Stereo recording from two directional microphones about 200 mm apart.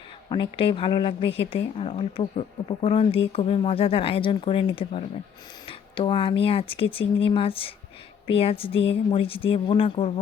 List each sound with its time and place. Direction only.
0.3 s speech: 25° left (ahead or behind)